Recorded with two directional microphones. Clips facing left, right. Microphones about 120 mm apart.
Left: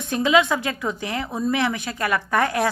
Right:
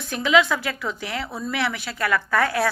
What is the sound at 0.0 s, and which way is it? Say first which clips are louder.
Speech: left 1 dB; 20° left (ahead or behind).